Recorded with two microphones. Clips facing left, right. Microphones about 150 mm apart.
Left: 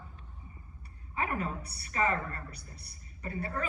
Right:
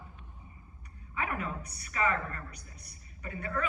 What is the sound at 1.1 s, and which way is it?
A woman's voice, 35° left (ahead or behind).